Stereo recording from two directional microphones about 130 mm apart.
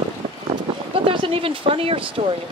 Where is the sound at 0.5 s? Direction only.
45° right (ahead or behind).